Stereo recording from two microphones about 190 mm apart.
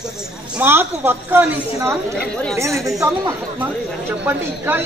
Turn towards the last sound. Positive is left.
turn(degrees=-10)  # may be behind; listen again after turning